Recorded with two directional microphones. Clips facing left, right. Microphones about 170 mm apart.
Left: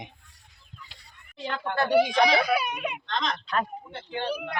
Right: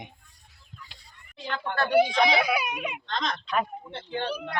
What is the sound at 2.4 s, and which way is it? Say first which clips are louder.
Speech: left 2 dB; centre (ahead or behind).